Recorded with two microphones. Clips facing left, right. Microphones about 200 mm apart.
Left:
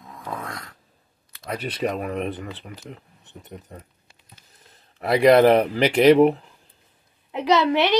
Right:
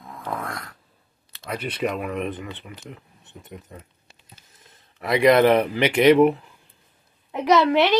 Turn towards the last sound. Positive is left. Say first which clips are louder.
# right 2 dB
turn(degrees=20)  # may be behind; listen again after turning